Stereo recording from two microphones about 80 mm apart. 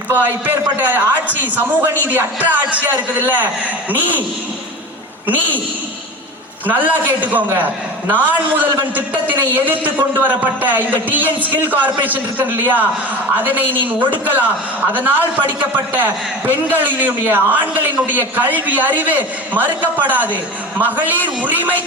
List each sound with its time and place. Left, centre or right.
0.1 s a man's voice: right
6.7 s a man's voice: right